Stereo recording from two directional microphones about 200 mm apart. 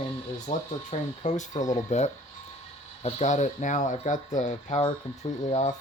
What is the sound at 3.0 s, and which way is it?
Speech, 35° left (ahead or behind).